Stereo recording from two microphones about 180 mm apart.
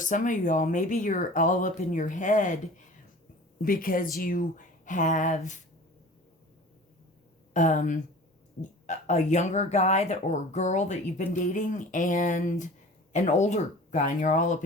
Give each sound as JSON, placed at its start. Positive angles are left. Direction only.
{"t": 0.0, "sound": "speech", "side_deg": 45}
{"t": 3.6, "sound": "speech", "side_deg": 50}
{"t": 7.5, "sound": "speech", "side_deg": 45}